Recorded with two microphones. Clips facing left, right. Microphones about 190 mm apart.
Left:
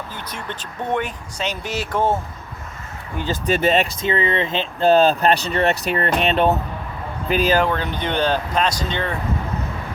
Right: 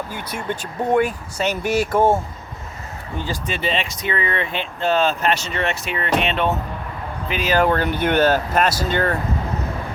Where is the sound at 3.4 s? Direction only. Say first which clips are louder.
Left 8 dB; 45° left (ahead or behind).